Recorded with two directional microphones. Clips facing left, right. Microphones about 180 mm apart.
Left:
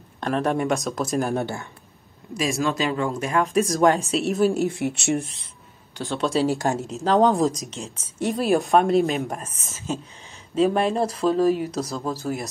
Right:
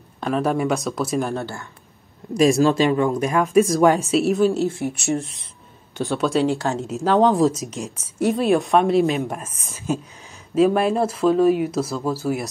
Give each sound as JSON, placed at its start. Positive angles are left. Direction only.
{"t": 0.2, "sound": "a woman's voice", "side_deg": 0}
{"t": 1.3, "sound": "speech", "side_deg": 20}
{"t": 2.3, "sound": "speech", "side_deg": -35}
{"t": 3.4, "sound": "speech", "side_deg": 35}
{"t": 4.1, "sound": "a woman's voice", "side_deg": 0}
{"t": 4.5, "sound": "speech", "side_deg": 15}
{"t": 6.1, "sound": "a woman's voice", "side_deg": 0}
{"t": 6.6, "sound": "speech", "side_deg": 15}
{"t": 6.9, "sound": "a woman's voice", "side_deg": -5}
{"t": 10.5, "sound": "a woman's voice", "side_deg": -5}